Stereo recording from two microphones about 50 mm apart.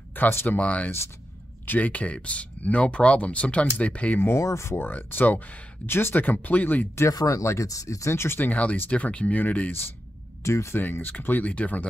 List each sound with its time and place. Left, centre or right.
0.1 s speech: left
0.5 s speech: left
4.4 s speech: left
4.9 s speech: left
5.9 s speech: left
6.2 s speech: left
7.0 s speech: left
8.4 s speech: left
10.4 s speech: left
10.8 s speech: left